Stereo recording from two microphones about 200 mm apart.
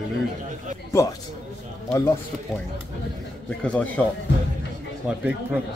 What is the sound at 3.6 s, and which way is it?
Speech, 5° left (ahead or behind).